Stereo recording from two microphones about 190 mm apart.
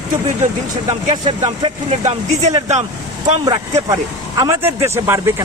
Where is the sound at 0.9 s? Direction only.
20° right (ahead or behind).